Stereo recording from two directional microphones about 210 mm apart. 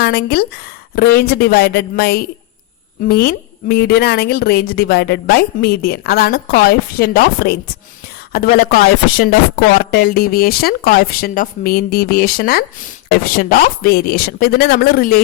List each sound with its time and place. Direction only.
0.0 s a woman's voice: 50° left (ahead or behind)